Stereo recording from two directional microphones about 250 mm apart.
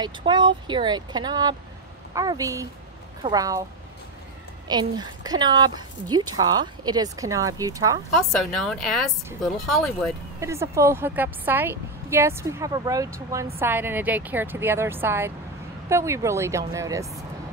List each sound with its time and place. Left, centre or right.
0.0 s a woman's voice: centre
4.6 s a woman's voice: centre
8.1 s speech: centre
10.4 s a woman's voice: centre